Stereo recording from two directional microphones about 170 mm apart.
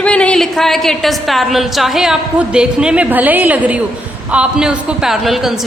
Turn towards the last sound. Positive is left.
turn(degrees=0)  # may be behind; listen again after turning